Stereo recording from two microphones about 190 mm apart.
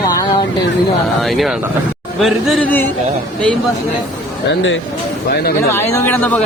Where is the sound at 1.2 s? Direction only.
Centre (ahead or behind).